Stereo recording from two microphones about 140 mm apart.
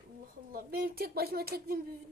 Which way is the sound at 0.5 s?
90° right.